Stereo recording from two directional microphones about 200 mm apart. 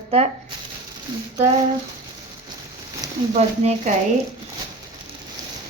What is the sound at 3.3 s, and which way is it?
Speech, 35° right (ahead or behind).